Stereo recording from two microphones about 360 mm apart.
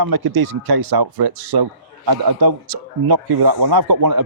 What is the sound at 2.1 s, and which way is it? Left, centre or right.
A man's voice, right.